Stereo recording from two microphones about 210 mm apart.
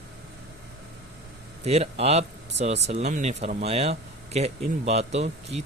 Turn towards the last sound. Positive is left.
turn(degrees=-30)  # may be behind; listen again after turning